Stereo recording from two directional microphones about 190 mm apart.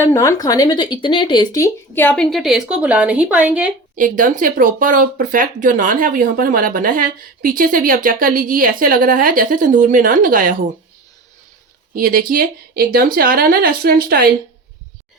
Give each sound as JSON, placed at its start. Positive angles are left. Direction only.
{"t": 0.0, "sound": "speech", "side_deg": 15}
{"t": 3.9, "sound": "speech", "side_deg": -45}
{"t": 11.9, "sound": "speech", "side_deg": -50}